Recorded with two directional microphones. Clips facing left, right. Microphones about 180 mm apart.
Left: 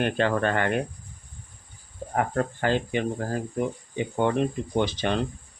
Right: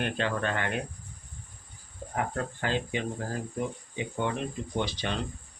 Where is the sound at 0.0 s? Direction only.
55° left (ahead or behind).